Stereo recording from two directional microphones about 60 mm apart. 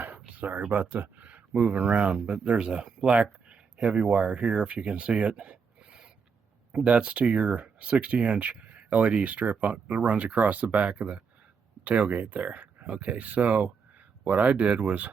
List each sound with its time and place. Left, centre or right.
0.3 s speech: right